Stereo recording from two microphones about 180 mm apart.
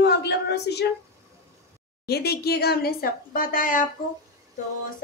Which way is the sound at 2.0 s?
60° left (ahead or behind).